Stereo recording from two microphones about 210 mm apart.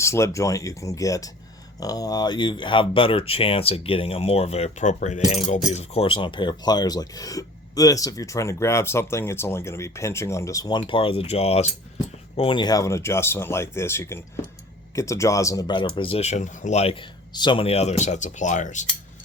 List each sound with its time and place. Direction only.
0.0 s speech: 15° left (ahead or behind); by 18.9 s 35° left (ahead or behind)